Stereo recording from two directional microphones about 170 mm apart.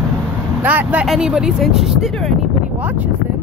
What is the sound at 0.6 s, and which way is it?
Speech, 10° right (ahead or behind).